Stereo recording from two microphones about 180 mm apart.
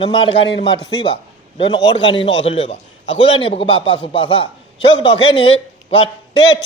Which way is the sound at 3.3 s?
30° left (ahead or behind).